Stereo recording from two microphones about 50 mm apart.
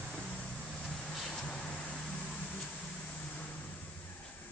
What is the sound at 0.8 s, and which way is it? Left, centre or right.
Vehicle, centre.